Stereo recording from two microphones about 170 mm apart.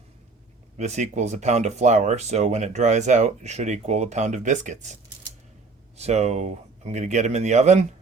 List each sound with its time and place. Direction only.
0.8 s speech: 45° right (ahead or behind)
6.0 s a man's voice: 40° right (ahead or behind)